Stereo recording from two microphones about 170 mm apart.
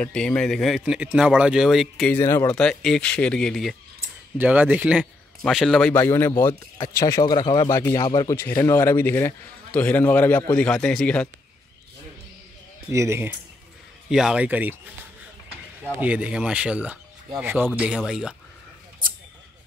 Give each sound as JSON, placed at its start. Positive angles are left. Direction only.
{"t": 0.0, "sound": "speech", "side_deg": 5}
{"t": 4.4, "sound": "a man's voice", "side_deg": -10}
{"t": 8.4, "sound": "a man's voice", "side_deg": 15}
{"t": 12.9, "sound": "speech", "side_deg": -15}
{"t": 14.1, "sound": "speech", "side_deg": -5}
{"t": 15.8, "sound": "speech", "side_deg": -5}